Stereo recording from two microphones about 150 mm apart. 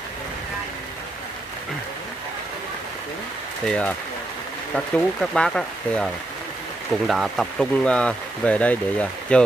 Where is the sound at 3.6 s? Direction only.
5° left (ahead or behind).